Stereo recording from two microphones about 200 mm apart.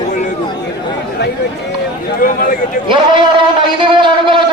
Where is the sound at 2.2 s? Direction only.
45° left (ahead or behind).